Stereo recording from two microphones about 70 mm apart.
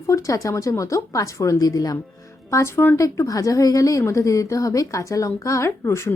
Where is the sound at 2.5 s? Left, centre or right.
Left.